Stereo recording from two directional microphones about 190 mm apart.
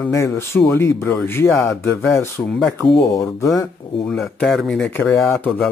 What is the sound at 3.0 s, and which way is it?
Speech, 20° left (ahead or behind).